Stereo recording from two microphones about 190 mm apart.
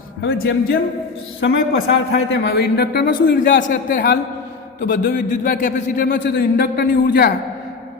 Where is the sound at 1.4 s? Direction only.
85° left; by 7.3 s 55° left (ahead or behind).